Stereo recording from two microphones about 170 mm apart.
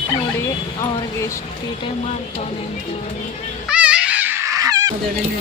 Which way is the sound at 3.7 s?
5° right (ahead or behind).